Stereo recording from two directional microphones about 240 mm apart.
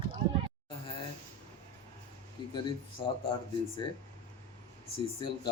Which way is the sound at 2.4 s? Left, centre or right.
Centre.